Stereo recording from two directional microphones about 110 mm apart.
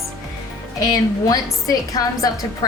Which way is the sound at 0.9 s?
35° left (ahead or behind).